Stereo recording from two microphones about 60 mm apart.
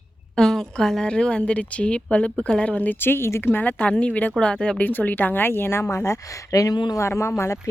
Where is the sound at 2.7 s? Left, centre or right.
Left.